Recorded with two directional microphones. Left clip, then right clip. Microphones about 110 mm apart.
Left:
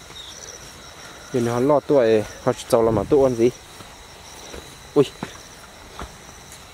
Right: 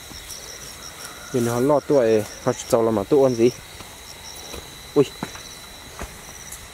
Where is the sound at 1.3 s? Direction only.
10° left (ahead or behind).